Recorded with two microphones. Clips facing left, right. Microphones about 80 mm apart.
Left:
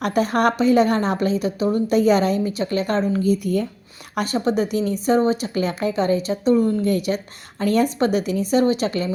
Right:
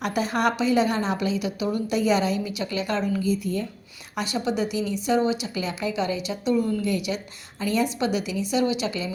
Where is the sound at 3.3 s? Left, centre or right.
Left.